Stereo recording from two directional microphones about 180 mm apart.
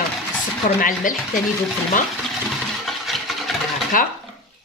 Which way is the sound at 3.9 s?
50° left (ahead or behind).